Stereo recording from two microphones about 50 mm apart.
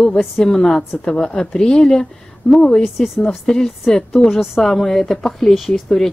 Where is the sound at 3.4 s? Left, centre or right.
Centre.